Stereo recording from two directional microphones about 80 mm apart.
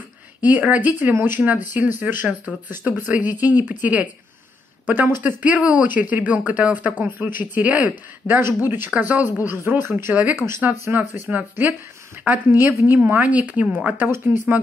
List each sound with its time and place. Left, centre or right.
0.4 s speech: centre